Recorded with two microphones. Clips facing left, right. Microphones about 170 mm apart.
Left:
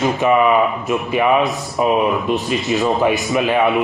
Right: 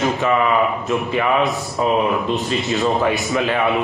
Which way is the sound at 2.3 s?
20° right (ahead or behind).